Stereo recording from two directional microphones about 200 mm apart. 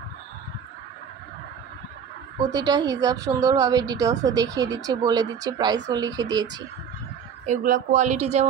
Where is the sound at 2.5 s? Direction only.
20° right (ahead or behind).